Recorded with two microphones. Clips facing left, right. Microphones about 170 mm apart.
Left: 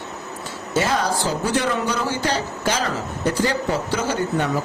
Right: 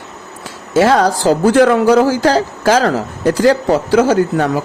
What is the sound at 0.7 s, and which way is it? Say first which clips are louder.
Speech: right 10 dB; 90° right.